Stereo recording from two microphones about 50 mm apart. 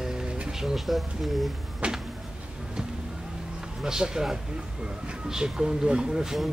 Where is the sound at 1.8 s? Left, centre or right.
Right.